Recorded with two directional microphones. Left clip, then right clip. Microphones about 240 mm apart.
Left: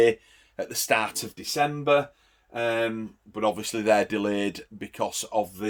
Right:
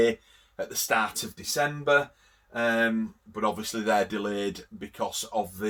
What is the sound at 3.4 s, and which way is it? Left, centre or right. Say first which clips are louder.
Speech: left 3 dB; left.